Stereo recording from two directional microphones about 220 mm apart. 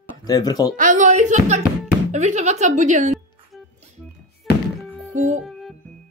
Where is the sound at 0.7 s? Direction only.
35° right (ahead or behind).